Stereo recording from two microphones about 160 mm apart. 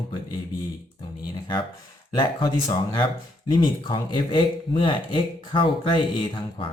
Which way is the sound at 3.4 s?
30° left (ahead or behind).